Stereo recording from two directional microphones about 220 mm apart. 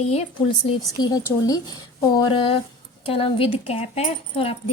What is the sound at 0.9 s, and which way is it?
Speech, 20° left (ahead or behind).